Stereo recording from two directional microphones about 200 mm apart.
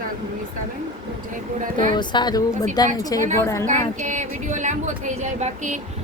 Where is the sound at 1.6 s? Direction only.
40° right (ahead or behind).